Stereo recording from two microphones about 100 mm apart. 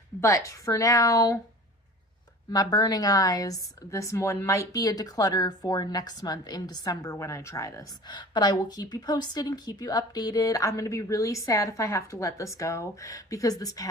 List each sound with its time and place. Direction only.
0.2 s a woman's voice: 30° left (ahead or behind)
2.5 s a woman's voice: 40° left (ahead or behind)
8.0 s a woman's voice: 50° left (ahead or behind)